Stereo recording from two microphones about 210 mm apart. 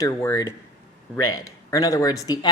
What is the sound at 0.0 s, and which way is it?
A woman's voice, 15° left (ahead or behind).